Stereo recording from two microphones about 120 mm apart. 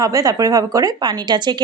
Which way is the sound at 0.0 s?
30° right (ahead or behind).